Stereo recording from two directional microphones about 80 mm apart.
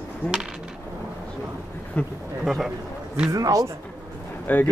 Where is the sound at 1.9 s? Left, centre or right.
Centre.